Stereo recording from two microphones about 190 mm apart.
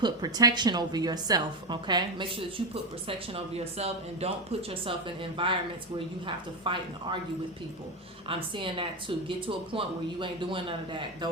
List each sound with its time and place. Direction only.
0.0 s speech: 20° right (ahead or behind)
8.3 s speech: 25° right (ahead or behind)